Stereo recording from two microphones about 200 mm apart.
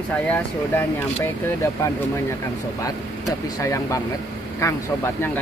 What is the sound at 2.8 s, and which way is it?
Speech, 15° left (ahead or behind).